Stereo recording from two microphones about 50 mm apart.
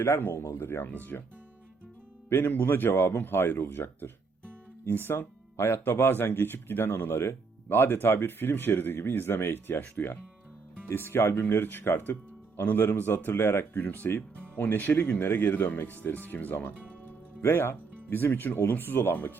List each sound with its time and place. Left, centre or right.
0.0 s speech: left
0.3 s speech: left
0.9 s speech: left
2.3 s speech: left
13.8 s speech: left
16.7 s music: right
17.4 s speech: left